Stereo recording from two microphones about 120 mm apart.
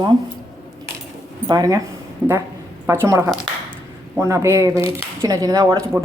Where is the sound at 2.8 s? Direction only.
20° right (ahead or behind).